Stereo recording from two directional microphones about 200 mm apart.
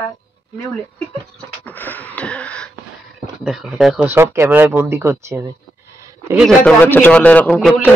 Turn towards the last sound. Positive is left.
turn(degrees=5)  # may be behind; listen again after turning